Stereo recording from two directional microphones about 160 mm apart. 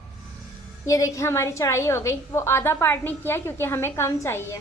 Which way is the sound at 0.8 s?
20° left (ahead or behind).